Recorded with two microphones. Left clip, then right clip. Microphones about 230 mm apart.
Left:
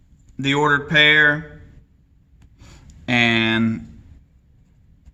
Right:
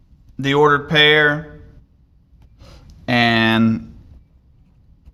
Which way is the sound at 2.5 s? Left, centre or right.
Centre.